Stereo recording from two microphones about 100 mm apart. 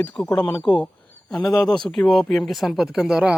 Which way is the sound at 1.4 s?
35° left (ahead or behind).